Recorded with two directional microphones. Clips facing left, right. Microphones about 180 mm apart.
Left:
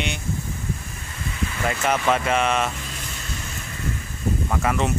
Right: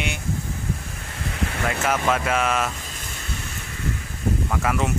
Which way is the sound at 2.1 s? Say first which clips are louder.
Left 2 dB; centre (ahead or behind).